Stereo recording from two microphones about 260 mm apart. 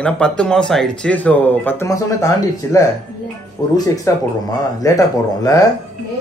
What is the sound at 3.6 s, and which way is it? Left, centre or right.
Speech, centre.